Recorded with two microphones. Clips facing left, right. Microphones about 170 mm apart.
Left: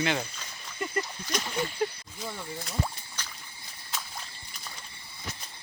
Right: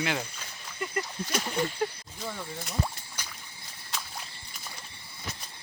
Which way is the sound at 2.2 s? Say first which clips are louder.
Right 1 dB; 5° left (ahead or behind).